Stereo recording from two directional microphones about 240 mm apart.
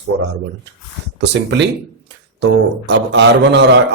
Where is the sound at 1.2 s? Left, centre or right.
Right.